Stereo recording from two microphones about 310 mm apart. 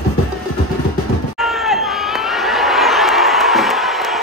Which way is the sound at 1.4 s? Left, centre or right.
Centre.